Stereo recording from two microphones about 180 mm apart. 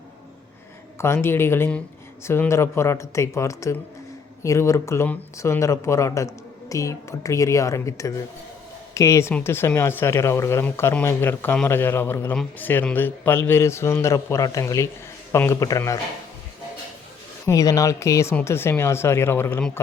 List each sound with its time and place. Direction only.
0.9 s speech: 15° left (ahead or behind)
17.4 s speech: 20° left (ahead or behind)